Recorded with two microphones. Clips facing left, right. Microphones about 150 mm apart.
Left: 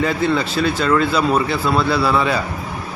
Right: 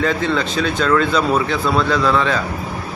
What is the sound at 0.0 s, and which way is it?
Speech, 5° left (ahead or behind).